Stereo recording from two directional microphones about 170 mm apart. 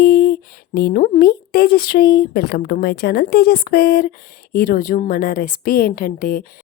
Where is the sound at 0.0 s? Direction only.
65° left (ahead or behind).